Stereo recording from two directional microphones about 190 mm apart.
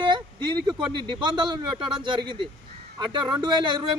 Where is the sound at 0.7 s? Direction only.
25° right (ahead or behind).